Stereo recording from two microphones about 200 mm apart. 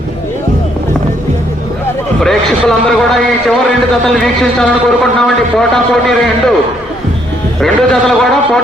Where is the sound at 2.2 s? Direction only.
Centre (ahead or behind).